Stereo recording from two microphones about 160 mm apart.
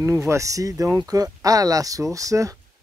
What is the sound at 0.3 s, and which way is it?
Speech, 20° right (ahead or behind).